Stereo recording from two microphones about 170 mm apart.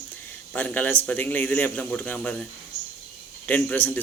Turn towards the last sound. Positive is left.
turn(degrees=10)  # may be behind; listen again after turning